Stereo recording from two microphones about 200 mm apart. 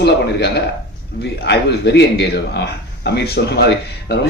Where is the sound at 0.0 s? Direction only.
55° left (ahead or behind).